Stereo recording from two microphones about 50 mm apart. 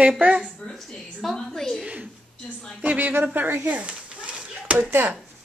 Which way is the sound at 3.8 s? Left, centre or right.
Right.